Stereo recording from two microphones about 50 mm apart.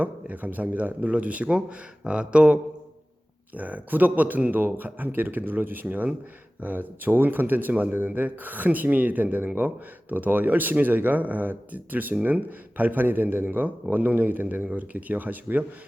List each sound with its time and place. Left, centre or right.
0.0 s speech: right